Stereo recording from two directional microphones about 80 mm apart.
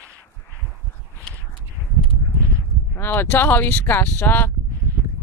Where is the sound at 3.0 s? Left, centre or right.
Left.